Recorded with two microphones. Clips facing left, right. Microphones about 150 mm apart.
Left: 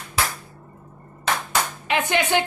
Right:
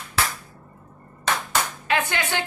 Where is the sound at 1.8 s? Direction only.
20° left (ahead or behind).